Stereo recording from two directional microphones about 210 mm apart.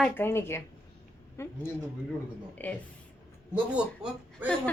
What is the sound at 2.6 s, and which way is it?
Speech, 10° left (ahead or behind).